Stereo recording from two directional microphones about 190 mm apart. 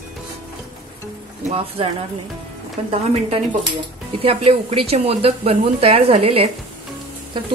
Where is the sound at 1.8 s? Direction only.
30° right (ahead or behind).